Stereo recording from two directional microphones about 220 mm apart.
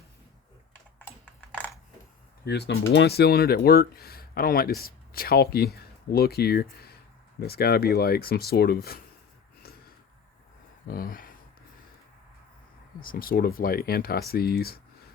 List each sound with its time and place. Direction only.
0.9 s typing: 5° left (ahead or behind)
2.4 s speech: 50° left (ahead or behind)
10.8 s speech: 40° left (ahead or behind)
13.0 s speech: 40° left (ahead or behind)